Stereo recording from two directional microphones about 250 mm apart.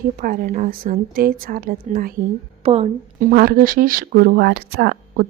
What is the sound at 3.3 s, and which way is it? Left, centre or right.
Speech, right.